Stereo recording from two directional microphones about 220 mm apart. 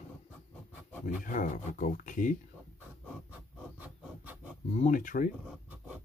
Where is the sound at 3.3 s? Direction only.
5° right (ahead or behind).